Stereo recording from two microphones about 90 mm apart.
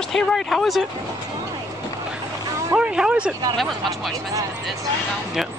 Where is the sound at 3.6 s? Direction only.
Centre (ahead or behind).